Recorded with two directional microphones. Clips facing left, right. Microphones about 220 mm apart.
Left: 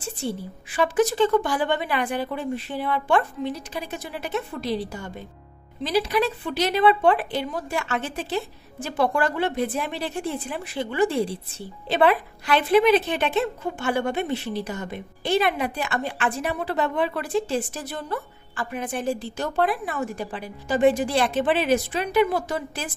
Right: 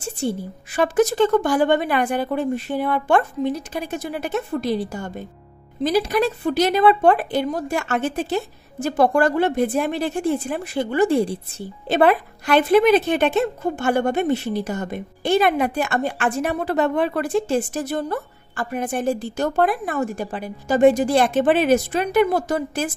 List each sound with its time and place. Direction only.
0.7 s a woman's voice: 45° right (ahead or behind)